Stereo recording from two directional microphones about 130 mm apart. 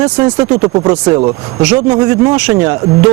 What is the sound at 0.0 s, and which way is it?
Speech, 25° right (ahead or behind).